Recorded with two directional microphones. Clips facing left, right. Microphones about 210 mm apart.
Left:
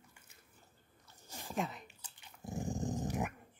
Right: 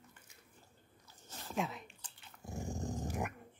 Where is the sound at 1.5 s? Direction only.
Centre (ahead or behind); by 3.1 s 20° left (ahead or behind).